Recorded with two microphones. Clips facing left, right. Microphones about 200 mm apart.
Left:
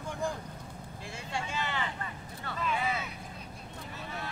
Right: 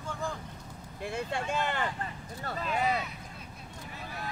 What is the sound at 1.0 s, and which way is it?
Speech, 60° right (ahead or behind).